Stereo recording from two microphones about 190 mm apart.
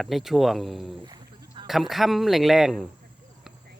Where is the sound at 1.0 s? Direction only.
20° right (ahead or behind).